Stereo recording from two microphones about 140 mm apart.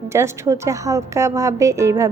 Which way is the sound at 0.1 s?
20° right (ahead or behind).